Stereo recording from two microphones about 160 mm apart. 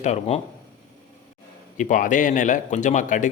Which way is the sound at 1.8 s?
55° left (ahead or behind).